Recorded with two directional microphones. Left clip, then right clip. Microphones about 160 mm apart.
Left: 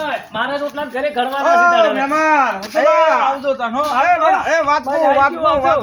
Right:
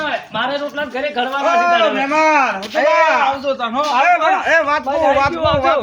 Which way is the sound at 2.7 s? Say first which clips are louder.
Left 2 dB; 15° left (ahead or behind).